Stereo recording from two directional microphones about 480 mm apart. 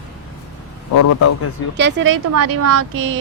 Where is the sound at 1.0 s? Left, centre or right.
Left.